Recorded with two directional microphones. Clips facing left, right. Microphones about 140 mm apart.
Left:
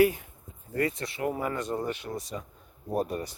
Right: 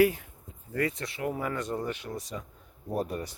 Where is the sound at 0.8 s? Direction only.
35° left (ahead or behind).